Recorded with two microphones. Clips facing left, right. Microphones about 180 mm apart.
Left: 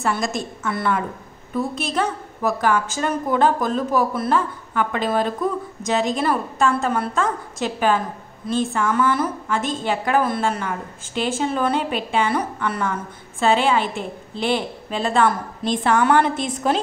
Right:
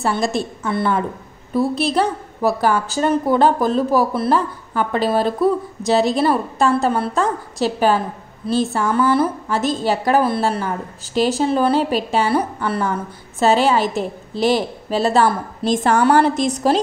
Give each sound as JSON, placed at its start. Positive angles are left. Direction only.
{"t": 0.0, "sound": "a woman's voice", "side_deg": -35}